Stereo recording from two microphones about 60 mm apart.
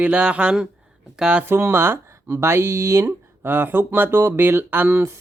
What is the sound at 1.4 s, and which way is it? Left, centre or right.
Speech, right.